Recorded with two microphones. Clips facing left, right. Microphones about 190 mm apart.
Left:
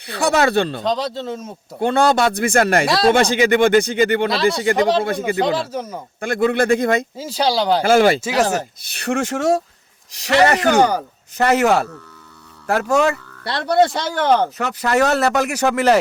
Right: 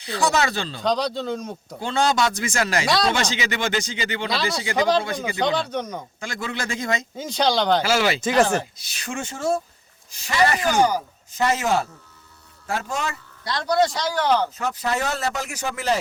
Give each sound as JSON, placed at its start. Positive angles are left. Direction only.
{"t": 0.0, "sound": "speech", "side_deg": 60}
{"t": 0.8, "sound": "a man's voice", "side_deg": 0}
{"t": 1.8, "sound": "speech", "side_deg": 55}
{"t": 2.8, "sound": "a man's voice", "side_deg": 0}
{"t": 3.1, "sound": "speech", "side_deg": 55}
{"t": 4.8, "sound": "a man's voice", "side_deg": 0}
{"t": 6.1, "sound": "speech", "side_deg": 60}
{"t": 7.2, "sound": "speech", "side_deg": 5}
{"t": 7.9, "sound": "speech", "side_deg": 50}
{"t": 8.2, "sound": "speech", "side_deg": 5}
{"t": 8.8, "sound": "speech", "side_deg": 60}